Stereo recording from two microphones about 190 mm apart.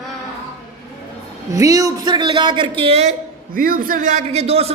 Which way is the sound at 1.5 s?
20° right (ahead or behind).